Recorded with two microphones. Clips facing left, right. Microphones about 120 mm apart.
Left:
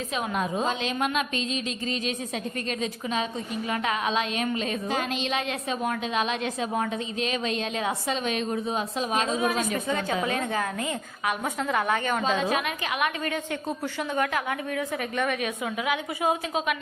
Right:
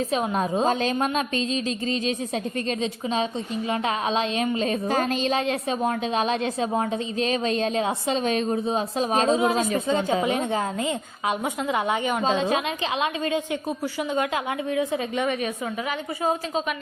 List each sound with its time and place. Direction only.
0.1 s a woman's voice: 35° right (ahead or behind); by 12.2 s 15° right (ahead or behind)
12.2 s a woman's voice: 30° right (ahead or behind)
15.9 s a woman's voice: 10° left (ahead or behind)